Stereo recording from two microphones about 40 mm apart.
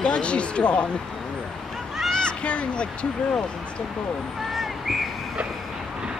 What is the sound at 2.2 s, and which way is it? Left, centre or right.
Speech, left.